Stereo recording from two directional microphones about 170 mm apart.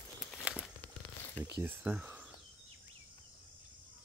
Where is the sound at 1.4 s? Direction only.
15° right (ahead or behind).